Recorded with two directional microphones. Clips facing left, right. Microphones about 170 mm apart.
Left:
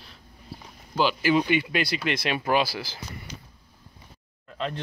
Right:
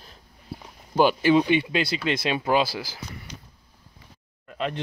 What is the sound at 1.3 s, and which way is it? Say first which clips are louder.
Speech: right 3 dB; 25° right (ahead or behind).